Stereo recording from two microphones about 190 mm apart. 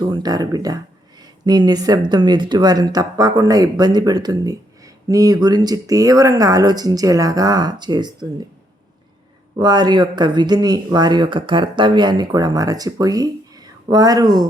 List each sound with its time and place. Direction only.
0.0 s speech: 20° right (ahead or behind)
9.6 s speech: 20° right (ahead or behind)